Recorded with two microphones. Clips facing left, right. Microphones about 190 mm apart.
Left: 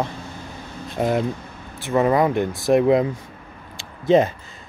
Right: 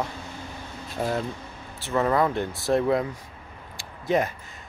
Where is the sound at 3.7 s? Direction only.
25° left (ahead or behind).